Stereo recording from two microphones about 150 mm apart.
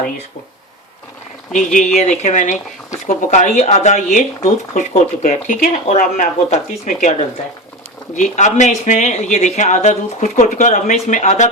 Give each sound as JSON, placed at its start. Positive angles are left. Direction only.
{"t": 1.5, "sound": "speech", "side_deg": 55}